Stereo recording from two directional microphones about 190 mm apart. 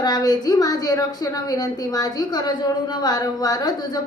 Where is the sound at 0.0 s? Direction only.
20° left (ahead or behind).